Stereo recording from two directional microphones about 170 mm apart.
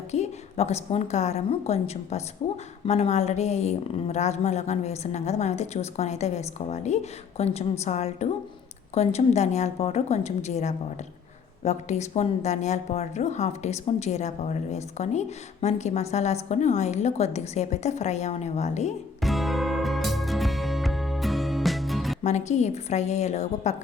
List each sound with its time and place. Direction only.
0.1 s a woman's voice: 40° left (ahead or behind)
19.2 s music: centre (ahead or behind)
22.2 s a woman's voice: 40° left (ahead or behind)